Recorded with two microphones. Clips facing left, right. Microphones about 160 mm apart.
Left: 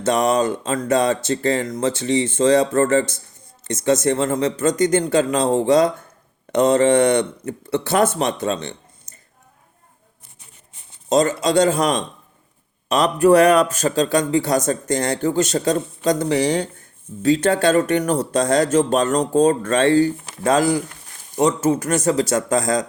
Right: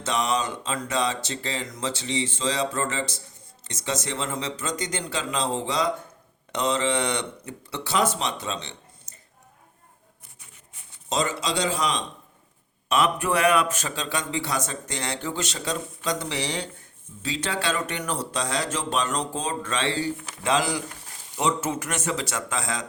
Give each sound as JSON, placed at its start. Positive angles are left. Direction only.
{"t": 0.0, "sound": "speech", "side_deg": 50}
{"t": 11.1, "sound": "speech", "side_deg": 50}
{"t": 12.9, "sound": "speech", "side_deg": 40}